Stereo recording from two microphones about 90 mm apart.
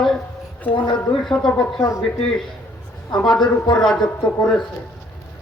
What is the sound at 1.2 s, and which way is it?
Speech, 5° left (ahead or behind).